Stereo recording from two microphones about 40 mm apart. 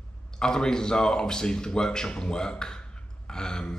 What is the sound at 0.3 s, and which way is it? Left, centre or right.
A man's voice, centre.